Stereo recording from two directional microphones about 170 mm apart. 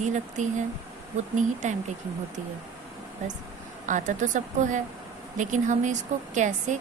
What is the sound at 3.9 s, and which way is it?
A woman's voice, 45° right (ahead or behind).